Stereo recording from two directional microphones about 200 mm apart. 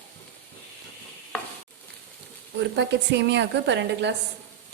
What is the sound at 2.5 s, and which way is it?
A woman's voice, 60° right (ahead or behind).